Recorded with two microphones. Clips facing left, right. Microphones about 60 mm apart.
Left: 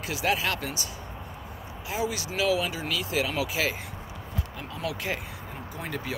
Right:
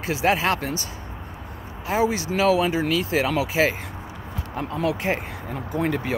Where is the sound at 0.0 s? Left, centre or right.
Right.